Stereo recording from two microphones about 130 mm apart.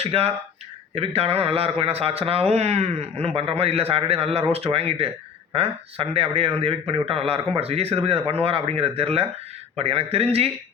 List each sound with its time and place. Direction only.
0.0 s speech: 50° right (ahead or behind)